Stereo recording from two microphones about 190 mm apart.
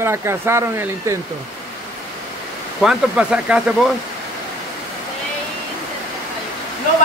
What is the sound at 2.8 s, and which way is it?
Speech, 5° right (ahead or behind).